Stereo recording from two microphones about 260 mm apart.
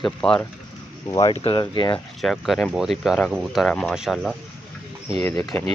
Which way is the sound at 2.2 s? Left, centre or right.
Centre.